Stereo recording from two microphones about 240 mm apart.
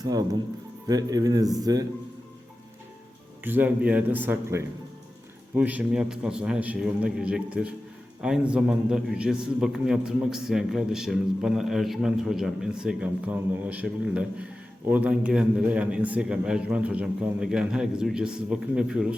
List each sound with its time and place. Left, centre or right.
0.0 s speech: centre
3.4 s a man's voice: centre